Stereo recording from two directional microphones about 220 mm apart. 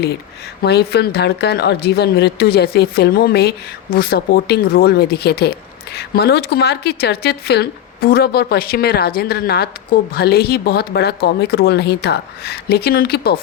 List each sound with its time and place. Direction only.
0.6 s speech: 45° left (ahead or behind)